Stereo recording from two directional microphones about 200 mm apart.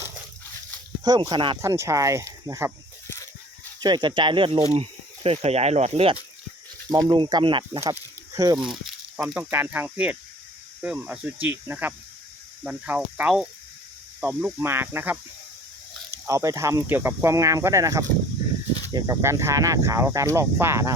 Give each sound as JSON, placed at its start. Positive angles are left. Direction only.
{"t": 1.0, "sound": "speech", "side_deg": -20}
{"t": 3.8, "sound": "speech", "side_deg": -20}
{"t": 7.8, "sound": "snake", "side_deg": -15}
{"t": 8.5, "sound": "speech", "side_deg": 0}